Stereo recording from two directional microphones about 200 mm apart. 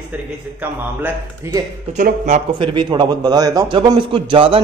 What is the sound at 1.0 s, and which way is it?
Speech, 15° right (ahead or behind).